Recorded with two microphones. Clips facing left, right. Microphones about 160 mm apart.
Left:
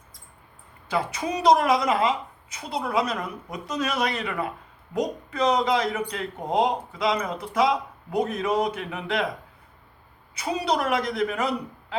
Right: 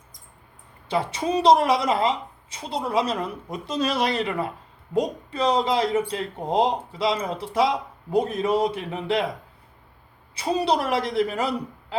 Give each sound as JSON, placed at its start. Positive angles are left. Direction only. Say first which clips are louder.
{"t": 0.9, "sound": "a woman's voice", "louder": "right 2 dB", "side_deg": -30}
{"t": 10.3, "sound": "speech", "louder": "right 3 dB", "side_deg": -30}